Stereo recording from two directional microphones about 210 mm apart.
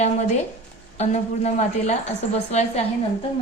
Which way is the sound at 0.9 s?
30° left (ahead or behind).